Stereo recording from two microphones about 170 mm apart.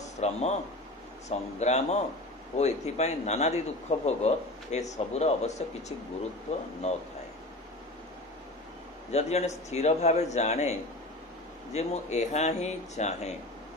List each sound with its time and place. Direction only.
0.2 s speech: 40° left (ahead or behind)
9.1 s speech: 40° left (ahead or behind)